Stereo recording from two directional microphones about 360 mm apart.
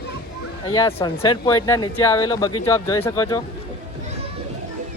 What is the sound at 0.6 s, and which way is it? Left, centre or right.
Speech, centre.